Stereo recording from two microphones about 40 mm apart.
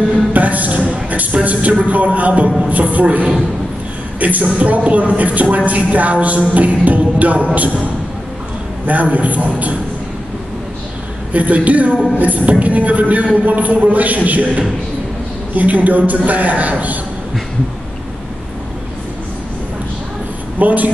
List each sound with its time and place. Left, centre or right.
0.1 s speech: right
8.8 s a man's voice: right
11.3 s a man's voice: right
20.5 s a man's voice: right